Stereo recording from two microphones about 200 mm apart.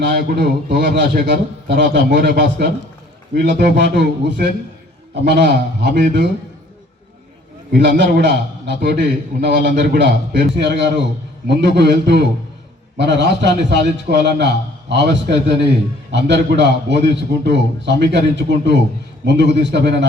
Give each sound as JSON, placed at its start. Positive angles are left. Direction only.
{"t": 0.0, "sound": "a man's voice", "side_deg": -55}
{"t": 7.7, "sound": "a man's voice", "side_deg": -55}